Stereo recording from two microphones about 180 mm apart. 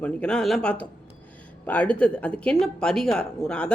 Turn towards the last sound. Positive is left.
turn(degrees=5)  # may be behind; listen again after turning